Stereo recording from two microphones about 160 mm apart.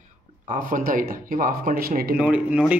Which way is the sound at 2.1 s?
10° right (ahead or behind).